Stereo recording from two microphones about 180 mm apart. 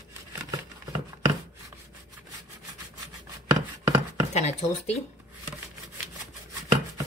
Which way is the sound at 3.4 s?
20° right (ahead or behind).